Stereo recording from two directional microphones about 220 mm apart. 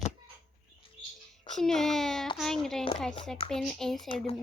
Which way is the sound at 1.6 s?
Centre (ahead or behind).